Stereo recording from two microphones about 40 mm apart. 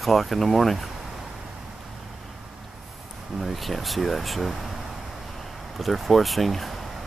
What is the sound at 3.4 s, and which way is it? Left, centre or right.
Speech, centre.